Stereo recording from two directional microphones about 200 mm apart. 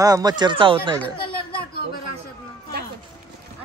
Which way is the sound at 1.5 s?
50° left (ahead or behind).